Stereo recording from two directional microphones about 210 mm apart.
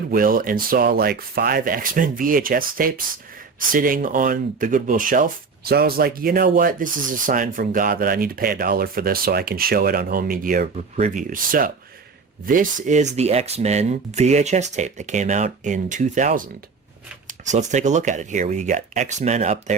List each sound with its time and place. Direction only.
0.1 s speech: 45° right (ahead or behind)